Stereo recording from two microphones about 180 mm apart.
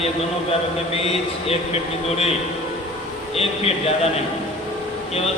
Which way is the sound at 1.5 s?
35° left (ahead or behind).